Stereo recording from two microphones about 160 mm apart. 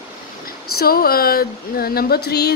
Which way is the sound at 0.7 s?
70° left (ahead or behind).